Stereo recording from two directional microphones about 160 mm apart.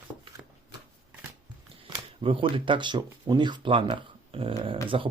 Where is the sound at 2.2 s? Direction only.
35° right (ahead or behind).